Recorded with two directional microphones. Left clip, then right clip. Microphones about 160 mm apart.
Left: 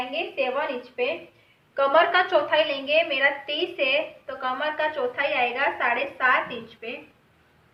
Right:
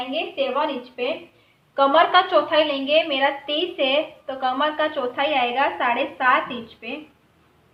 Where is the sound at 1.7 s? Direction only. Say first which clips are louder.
Right 3 dB; 25° right (ahead or behind).